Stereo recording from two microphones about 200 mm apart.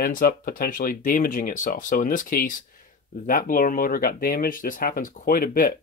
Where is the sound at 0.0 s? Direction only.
45° left (ahead or behind).